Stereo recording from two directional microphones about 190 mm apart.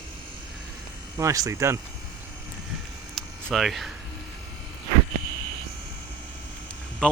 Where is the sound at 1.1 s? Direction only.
15° right (ahead or behind).